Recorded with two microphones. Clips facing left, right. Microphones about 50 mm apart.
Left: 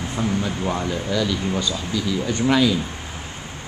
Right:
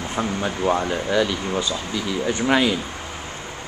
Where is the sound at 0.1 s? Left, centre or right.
Right.